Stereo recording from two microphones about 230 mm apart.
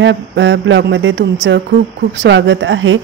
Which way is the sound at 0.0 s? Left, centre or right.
Right.